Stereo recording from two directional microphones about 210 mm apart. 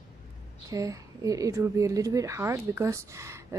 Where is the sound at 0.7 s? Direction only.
15° right (ahead or behind).